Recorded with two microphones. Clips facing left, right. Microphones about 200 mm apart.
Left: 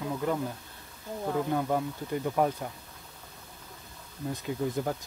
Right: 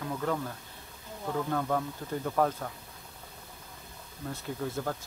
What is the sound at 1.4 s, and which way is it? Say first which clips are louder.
Speech: left 2 dB; 15° left (ahead or behind).